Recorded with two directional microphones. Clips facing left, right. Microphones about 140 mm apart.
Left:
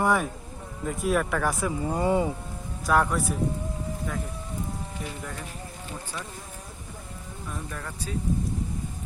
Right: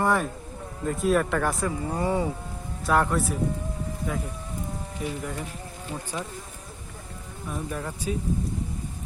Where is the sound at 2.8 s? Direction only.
Centre (ahead or behind).